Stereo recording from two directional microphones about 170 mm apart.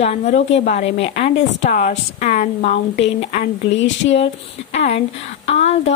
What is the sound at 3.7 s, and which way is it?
Speech, 90° left.